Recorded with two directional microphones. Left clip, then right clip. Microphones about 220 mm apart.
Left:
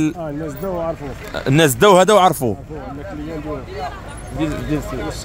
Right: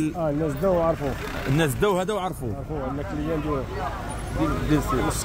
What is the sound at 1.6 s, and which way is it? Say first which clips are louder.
Speech: left 12 dB; 40° left (ahead or behind).